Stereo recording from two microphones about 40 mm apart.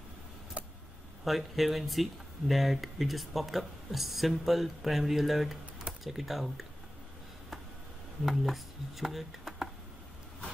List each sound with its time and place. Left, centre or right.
0.6 s a sound: right
1.2 s speech: centre
8.3 s speech: centre